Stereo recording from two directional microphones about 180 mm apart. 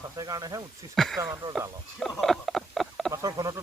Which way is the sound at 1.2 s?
15° right (ahead or behind).